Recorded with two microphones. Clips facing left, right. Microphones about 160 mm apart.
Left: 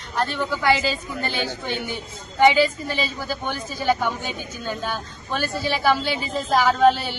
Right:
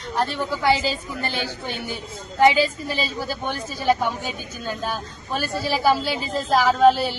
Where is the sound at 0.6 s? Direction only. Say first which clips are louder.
Even; 35° right (ahead or behind).